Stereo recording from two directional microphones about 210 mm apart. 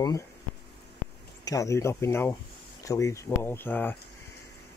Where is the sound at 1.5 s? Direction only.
15° left (ahead or behind).